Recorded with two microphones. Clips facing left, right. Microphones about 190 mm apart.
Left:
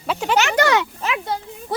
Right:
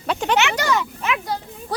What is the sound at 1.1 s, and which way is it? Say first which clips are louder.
Speech: left 1 dB; 20° left (ahead or behind).